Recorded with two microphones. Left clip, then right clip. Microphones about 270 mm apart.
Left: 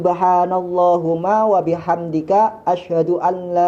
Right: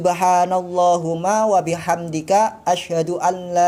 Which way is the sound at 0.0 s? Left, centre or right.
Right.